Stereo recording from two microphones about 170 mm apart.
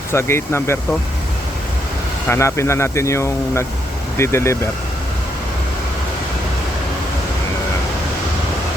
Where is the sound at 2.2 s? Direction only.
15° left (ahead or behind).